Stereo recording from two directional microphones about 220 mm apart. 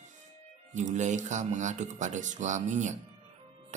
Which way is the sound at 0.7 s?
35° right (ahead or behind).